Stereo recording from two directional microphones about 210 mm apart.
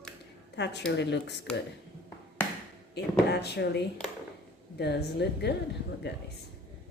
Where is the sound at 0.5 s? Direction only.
55° left (ahead or behind).